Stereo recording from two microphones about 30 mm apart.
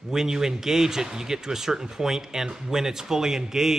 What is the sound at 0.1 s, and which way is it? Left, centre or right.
A man's voice, centre.